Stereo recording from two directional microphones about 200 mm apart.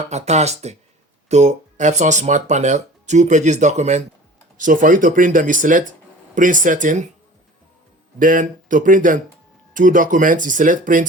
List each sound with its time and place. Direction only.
0.1 s speech: 35° right (ahead or behind)
8.2 s speech: 40° right (ahead or behind)